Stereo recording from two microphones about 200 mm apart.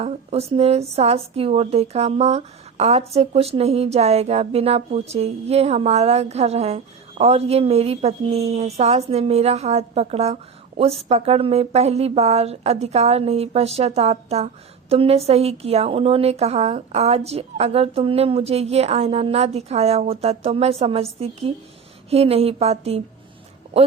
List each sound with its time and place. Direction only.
0.0 s speech: 30° right (ahead or behind)